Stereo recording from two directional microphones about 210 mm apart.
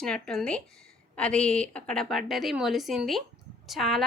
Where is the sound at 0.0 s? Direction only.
5° left (ahead or behind).